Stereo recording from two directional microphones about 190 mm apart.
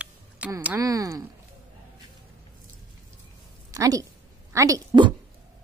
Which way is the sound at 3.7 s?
20° right (ahead or behind).